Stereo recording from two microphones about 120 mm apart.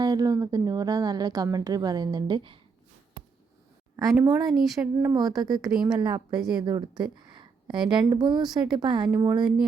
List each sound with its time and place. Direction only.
0.0 s a woman's voice: 30° right (ahead or behind)
4.2 s a woman's voice: 30° right (ahead or behind)
4.6 s speech: centre (ahead or behind)
5.1 s a woman's voice: 35° right (ahead or behind)